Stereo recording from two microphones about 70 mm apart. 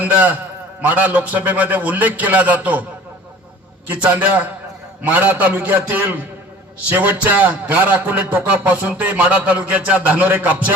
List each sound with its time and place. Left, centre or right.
0.0 s a man's voice: right
3.8 s a man's voice: right